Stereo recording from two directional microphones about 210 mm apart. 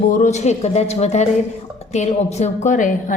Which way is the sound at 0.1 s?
35° left (ahead or behind).